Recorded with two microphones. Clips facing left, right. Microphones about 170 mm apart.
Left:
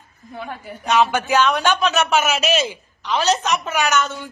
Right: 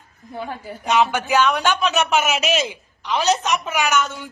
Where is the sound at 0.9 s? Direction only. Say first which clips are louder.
Left 1 dB; 10° right (ahead or behind).